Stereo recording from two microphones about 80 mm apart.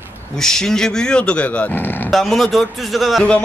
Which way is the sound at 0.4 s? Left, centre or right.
Centre.